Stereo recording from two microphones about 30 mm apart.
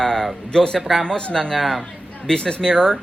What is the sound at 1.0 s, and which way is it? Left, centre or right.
Speech, left.